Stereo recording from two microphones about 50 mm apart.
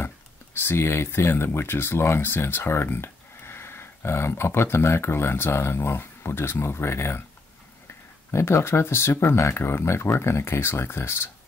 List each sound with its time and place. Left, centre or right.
0.6 s speech: left
8.3 s speech: left